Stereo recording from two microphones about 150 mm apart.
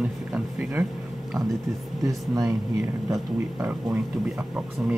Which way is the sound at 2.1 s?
20° right (ahead or behind).